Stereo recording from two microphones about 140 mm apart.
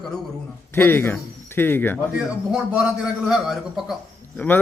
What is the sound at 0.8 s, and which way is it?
Speech, 15° left (ahead or behind).